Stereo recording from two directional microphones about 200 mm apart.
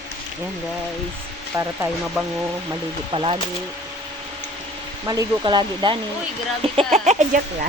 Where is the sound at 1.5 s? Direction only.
15° right (ahead or behind).